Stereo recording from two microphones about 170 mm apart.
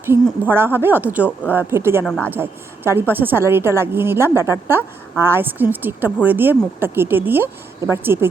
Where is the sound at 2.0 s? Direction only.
5° left (ahead or behind).